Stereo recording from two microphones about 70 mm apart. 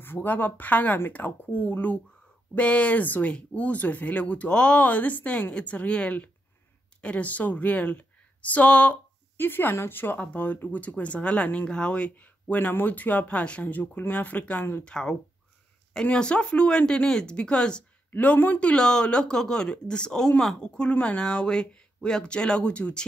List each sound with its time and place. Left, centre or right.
0.0 s speech: left
9.4 s speech: left
14.9 s speech: centre
18.1 s speech: left